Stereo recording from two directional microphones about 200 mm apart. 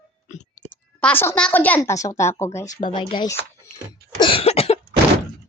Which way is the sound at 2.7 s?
40° left (ahead or behind).